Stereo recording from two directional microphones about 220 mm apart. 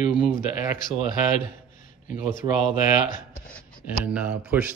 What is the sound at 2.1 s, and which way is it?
Speech, 40° left (ahead or behind).